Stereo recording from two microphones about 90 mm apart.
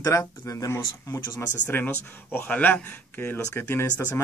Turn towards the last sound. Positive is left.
turn(degrees=20)  # may be behind; listen again after turning